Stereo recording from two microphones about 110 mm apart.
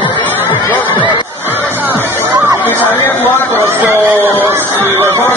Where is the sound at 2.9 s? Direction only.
20° left (ahead or behind).